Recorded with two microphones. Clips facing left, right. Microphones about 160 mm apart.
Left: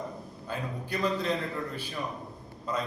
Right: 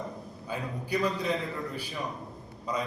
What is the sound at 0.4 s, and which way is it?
Mantra, 10° right (ahead or behind).